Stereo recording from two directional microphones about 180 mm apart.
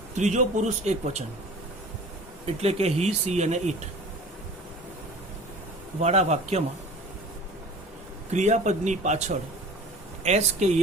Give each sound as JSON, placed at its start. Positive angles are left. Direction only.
{"t": 0.2, "sound": "speech", "side_deg": -40}
{"t": 2.6, "sound": "speech", "side_deg": -35}
{"t": 6.0, "sound": "speech", "side_deg": -40}
{"t": 8.3, "sound": "speech", "side_deg": -40}